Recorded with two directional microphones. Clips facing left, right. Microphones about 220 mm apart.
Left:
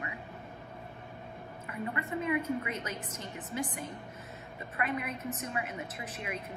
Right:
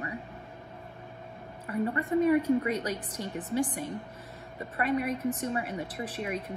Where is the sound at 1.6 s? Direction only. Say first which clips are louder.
Right 8 dB; 35° right (ahead or behind).